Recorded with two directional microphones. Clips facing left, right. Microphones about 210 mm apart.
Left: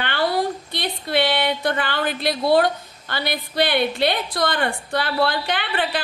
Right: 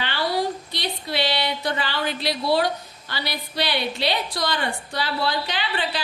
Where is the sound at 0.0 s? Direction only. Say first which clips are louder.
Left 3 dB; 55° left (ahead or behind).